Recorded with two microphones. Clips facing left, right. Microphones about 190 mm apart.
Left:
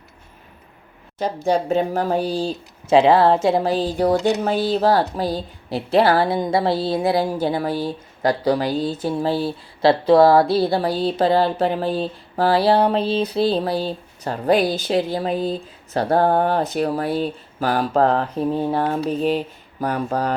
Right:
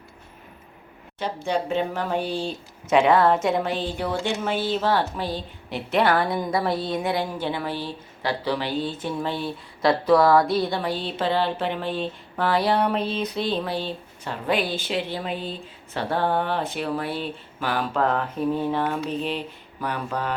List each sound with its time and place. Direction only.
1.5 s speech: 40° left (ahead or behind)